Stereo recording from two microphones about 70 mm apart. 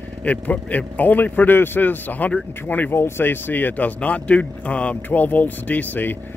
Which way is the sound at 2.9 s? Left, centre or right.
Left.